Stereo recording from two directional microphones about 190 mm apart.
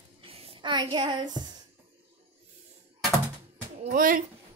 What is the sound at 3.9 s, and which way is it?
Speech, 45° right (ahead or behind).